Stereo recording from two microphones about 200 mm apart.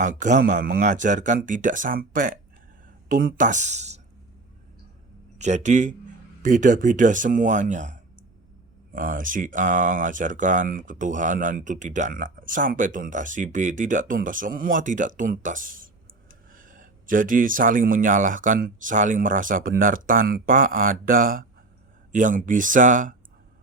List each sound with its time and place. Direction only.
0.0 s speech: 40° right (ahead or behind)
5.4 s speech: 35° right (ahead or behind)